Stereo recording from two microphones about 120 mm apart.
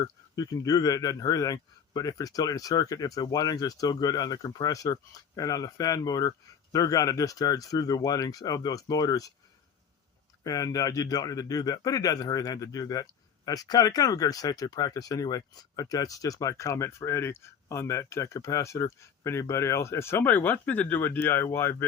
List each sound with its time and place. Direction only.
0.0 s speech: 30° left (ahead or behind)
10.4 s speech: 30° left (ahead or behind)